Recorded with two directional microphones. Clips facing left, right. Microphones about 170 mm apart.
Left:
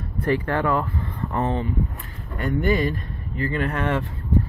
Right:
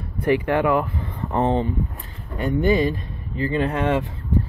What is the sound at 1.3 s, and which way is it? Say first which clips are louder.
Speech: right 4 dB; 25° right (ahead or behind).